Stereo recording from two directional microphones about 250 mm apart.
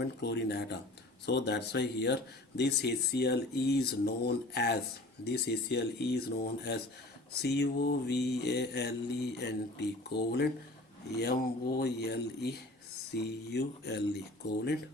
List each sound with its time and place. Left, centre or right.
0.0 s speech: left
1.2 s mantra: left
11.8 s mantra: left